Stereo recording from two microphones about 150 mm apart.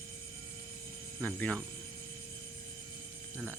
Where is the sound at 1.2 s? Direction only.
10° left (ahead or behind).